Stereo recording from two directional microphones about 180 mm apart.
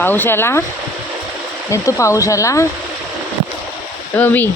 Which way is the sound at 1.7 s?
15° left (ahead or behind).